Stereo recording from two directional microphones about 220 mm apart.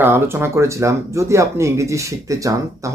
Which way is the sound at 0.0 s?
10° right (ahead or behind).